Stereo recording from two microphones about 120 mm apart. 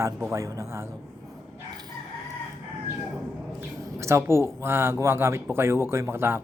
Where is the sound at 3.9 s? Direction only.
20° right (ahead or behind).